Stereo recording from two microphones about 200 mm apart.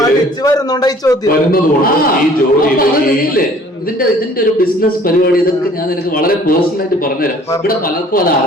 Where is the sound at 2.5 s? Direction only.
45° left (ahead or behind).